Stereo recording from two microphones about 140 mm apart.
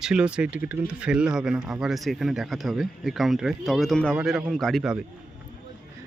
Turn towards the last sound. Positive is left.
turn(degrees=-5)  # may be behind; listen again after turning